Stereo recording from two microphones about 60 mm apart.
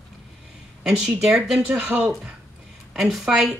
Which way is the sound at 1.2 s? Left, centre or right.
Centre.